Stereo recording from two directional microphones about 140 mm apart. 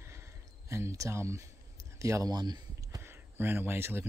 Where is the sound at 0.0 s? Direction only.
20° right (ahead or behind).